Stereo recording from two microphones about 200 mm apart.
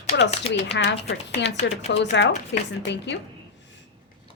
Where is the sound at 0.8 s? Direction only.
65° left (ahead or behind).